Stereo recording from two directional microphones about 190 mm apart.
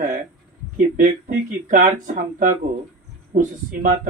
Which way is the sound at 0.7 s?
45° right (ahead or behind).